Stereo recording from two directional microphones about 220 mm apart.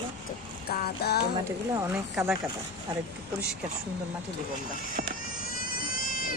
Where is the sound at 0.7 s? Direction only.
45° left (ahead or behind).